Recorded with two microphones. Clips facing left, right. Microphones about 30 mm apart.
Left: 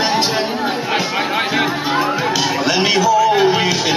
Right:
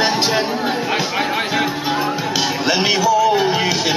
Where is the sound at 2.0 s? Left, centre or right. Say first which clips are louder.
Left 2 dB; centre.